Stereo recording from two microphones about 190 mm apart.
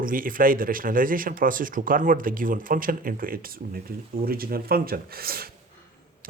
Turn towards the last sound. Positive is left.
turn(degrees=-50)  # may be behind; listen again after turning